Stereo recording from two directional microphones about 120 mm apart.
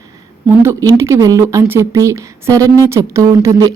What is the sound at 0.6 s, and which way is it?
Speech, 25° right (ahead or behind).